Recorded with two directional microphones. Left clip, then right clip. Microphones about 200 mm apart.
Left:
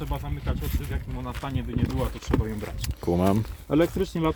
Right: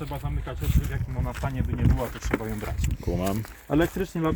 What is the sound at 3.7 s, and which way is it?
Speech, 10° right (ahead or behind).